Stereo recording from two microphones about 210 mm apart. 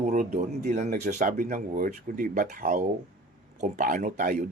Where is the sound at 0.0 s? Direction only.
40° right (ahead or behind).